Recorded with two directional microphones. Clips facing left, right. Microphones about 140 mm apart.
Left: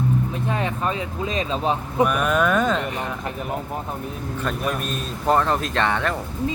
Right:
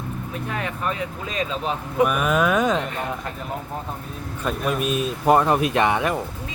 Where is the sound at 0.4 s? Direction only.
25° left (ahead or behind).